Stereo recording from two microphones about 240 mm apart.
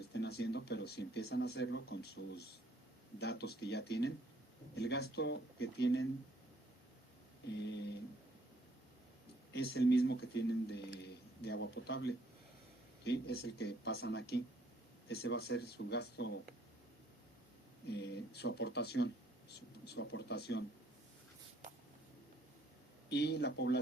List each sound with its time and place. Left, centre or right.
0.1 s speech: left
9.5 s speech: left
17.8 s speech: left
23.0 s speech: left